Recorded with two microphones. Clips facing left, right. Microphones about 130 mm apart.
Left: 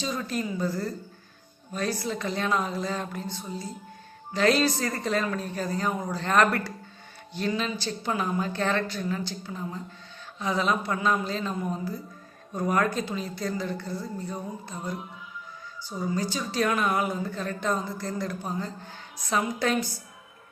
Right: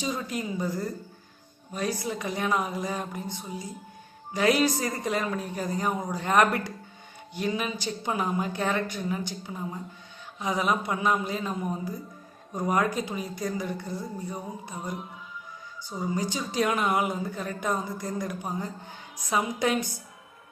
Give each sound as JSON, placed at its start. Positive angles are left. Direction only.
{"t": 0.0, "sound": "a woman's voice", "side_deg": -15}